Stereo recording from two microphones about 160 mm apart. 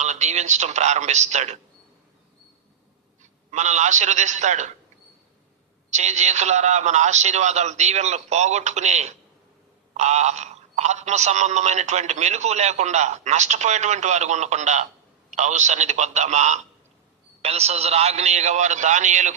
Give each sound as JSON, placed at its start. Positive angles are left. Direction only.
{"t": 0.0, "sound": "a man's voice", "side_deg": -45}
{"t": 3.5, "sound": "a man's voice", "side_deg": -45}
{"t": 5.9, "sound": "a man's voice", "side_deg": -45}